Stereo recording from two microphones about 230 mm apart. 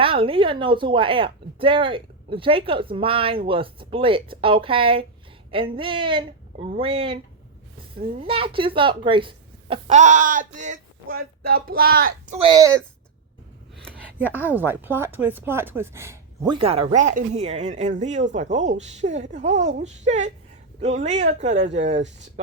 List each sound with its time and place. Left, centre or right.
0.0 s a woman's voice: right
8.2 s speech: right
12.4 s speech: centre
13.7 s a sound: centre
14.4 s speech: centre
16.6 s a woman's voice: right